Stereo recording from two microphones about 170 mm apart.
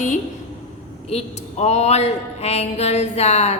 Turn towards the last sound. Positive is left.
turn(degrees=40)  # may be behind; listen again after turning